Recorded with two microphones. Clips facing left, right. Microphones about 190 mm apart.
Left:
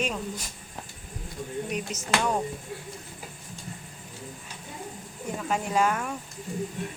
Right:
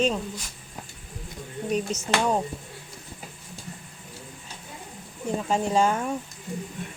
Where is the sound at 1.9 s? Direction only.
30° right (ahead or behind).